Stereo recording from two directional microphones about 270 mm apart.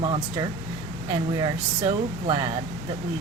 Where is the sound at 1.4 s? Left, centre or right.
Centre.